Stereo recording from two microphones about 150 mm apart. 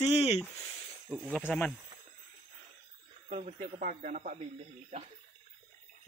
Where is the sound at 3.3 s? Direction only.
45° right (ahead or behind).